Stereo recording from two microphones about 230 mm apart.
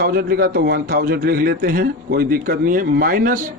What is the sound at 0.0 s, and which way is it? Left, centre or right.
A man's voice, right.